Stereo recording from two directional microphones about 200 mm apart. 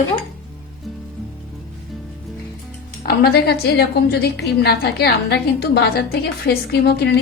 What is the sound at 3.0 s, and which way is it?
A woman's voice, 50° left (ahead or behind).